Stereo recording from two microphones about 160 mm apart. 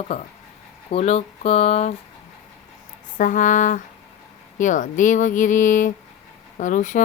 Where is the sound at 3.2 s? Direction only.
55° left (ahead or behind).